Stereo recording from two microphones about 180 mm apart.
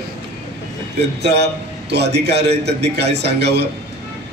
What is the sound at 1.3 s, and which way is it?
A man's voice, 70° right (ahead or behind).